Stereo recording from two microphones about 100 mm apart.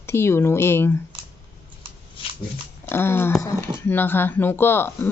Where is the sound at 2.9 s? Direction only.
25° left (ahead or behind).